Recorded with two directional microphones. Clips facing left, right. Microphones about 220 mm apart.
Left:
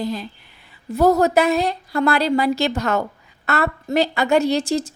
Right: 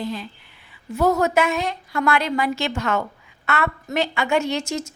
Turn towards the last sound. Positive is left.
turn(degrees=35)  # may be behind; listen again after turning